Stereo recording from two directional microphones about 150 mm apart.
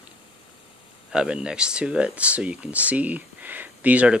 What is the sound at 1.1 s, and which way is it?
Speech, 5° right (ahead or behind).